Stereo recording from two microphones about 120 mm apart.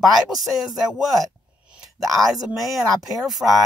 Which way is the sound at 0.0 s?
Centre (ahead or behind).